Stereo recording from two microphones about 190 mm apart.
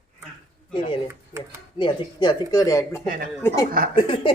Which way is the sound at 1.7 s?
25° left (ahead or behind).